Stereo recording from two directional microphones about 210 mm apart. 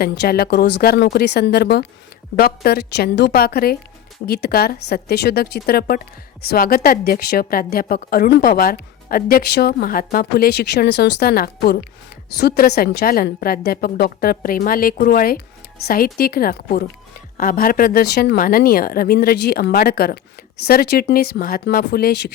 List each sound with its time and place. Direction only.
0.0 s a woman's voice: 45° left (ahead or behind)